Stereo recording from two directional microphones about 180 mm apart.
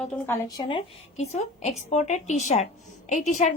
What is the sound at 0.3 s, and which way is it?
A woman's voice, 20° left (ahead or behind).